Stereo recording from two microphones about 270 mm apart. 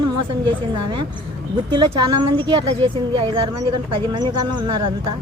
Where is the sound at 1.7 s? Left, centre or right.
Centre.